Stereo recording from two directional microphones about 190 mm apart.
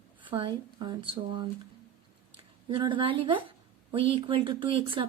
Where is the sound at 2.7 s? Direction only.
25° right (ahead or behind).